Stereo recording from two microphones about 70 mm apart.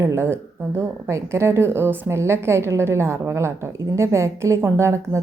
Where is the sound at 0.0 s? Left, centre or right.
Right.